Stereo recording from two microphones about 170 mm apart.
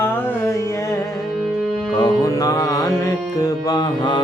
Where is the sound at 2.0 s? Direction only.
20° left (ahead or behind).